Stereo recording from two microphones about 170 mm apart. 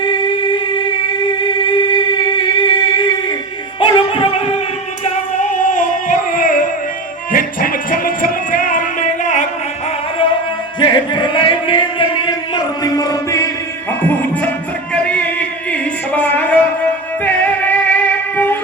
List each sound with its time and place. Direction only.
0.0 s music: 25° left (ahead or behind)
5.4 s singing: 50° left (ahead or behind)
7.3 s music: 55° left (ahead or behind)
10.8 s music: 25° left (ahead or behind); by 18.5 s 10° left (ahead or behind)